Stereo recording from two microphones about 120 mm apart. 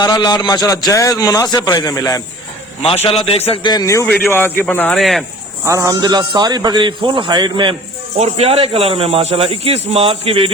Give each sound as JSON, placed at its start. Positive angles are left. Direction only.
{"t": 0.0, "sound": "a man's voice", "side_deg": 35}
{"t": 2.8, "sound": "a man's voice", "side_deg": 55}
{"t": 3.6, "sound": "a man's voice", "side_deg": 35}
{"t": 4.9, "sound": "speech", "side_deg": 0}
{"t": 5.6, "sound": "a man's voice", "side_deg": -25}
{"t": 8.2, "sound": "a man's voice", "side_deg": -55}